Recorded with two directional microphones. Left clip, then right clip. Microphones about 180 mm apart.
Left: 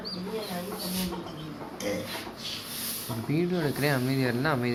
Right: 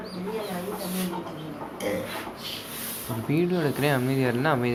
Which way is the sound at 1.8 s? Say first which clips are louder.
Right 3 dB; 35° left (ahead or behind).